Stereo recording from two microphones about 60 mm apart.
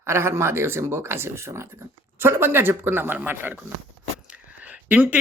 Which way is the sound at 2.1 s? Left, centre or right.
Right.